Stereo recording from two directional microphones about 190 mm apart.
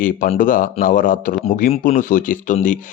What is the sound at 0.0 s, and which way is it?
Speech, 45° left (ahead or behind).